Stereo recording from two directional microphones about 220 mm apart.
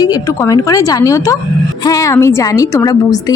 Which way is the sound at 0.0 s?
15° left (ahead or behind).